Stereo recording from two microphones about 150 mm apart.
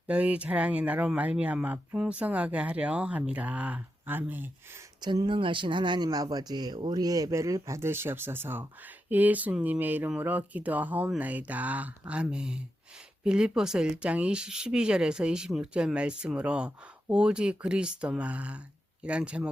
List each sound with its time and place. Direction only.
0.1 s speech: 10° right (ahead or behind)
4.9 s speech: 25° right (ahead or behind); by 19.5 s 10° right (ahead or behind)